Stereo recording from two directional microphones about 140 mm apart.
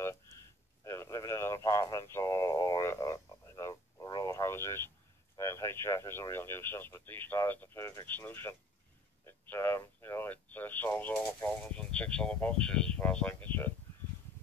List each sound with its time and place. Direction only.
0.0 s a sound: 20° left (ahead or behind)
0.8 s radio: 20° left (ahead or behind)
5.4 s speech: 20° left (ahead or behind)